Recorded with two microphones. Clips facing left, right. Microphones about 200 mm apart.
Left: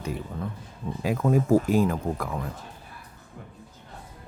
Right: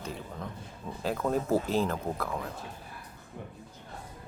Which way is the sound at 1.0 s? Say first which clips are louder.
Left 5 dB; 10° left (ahead or behind).